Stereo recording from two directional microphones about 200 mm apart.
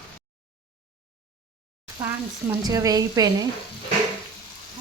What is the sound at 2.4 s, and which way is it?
Speech, 15° right (ahead or behind).